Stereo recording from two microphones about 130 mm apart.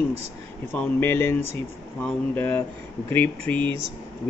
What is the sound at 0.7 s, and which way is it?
A woman's voice, 15° left (ahead or behind).